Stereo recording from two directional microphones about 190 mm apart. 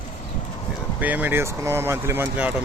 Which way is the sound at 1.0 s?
10° right (ahead or behind).